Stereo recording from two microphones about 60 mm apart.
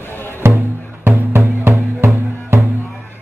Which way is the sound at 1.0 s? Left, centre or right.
Right.